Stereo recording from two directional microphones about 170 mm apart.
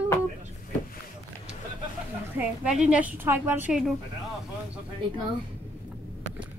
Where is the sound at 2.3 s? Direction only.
5° right (ahead or behind).